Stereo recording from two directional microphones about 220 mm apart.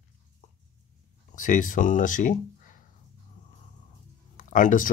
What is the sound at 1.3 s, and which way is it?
Speech, 35° left (ahead or behind).